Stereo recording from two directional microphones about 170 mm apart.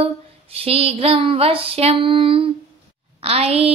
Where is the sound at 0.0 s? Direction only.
35° right (ahead or behind).